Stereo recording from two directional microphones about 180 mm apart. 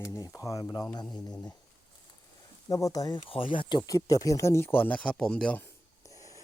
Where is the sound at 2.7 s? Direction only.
20° left (ahead or behind).